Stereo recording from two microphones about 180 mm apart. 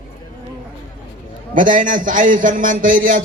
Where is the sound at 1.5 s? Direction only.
45° right (ahead or behind).